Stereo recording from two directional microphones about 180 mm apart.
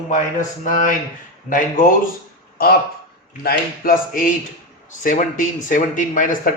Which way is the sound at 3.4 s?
55° left (ahead or behind).